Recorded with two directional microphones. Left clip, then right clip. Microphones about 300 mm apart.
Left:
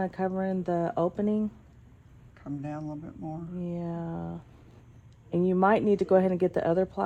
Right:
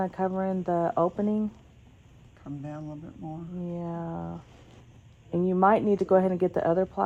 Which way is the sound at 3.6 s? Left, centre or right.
Centre.